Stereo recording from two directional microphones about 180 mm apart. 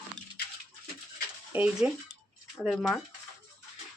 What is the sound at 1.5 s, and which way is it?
Speech, 5° right (ahead or behind).